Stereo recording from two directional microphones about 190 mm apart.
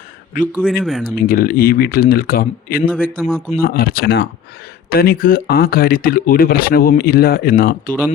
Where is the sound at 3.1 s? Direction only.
Centre (ahead or behind).